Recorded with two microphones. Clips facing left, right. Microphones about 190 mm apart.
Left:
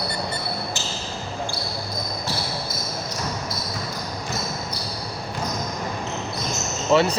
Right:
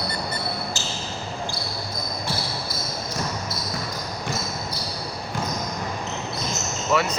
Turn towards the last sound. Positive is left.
turn(degrees=30)  # may be behind; listen again after turning